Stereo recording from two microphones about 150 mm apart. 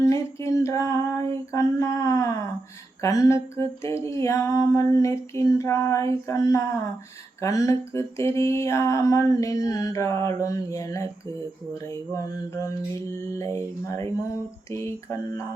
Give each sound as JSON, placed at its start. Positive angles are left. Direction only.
{"t": 0.0, "sound": "female singing", "side_deg": 20}
{"t": 3.0, "sound": "mantra", "side_deg": 20}
{"t": 12.1, "sound": "mantra", "side_deg": 20}